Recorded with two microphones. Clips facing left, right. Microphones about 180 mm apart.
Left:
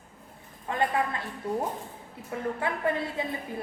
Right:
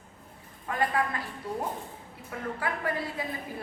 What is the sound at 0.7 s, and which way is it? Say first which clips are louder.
Speech: left 1 dB; 25° left (ahead or behind).